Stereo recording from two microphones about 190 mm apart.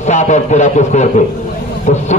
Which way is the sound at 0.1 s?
40° left (ahead or behind).